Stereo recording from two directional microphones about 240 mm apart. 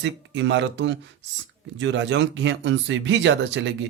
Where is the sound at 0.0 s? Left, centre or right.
Right.